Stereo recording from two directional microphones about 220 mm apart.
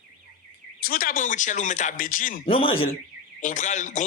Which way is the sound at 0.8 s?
40° left (ahead or behind).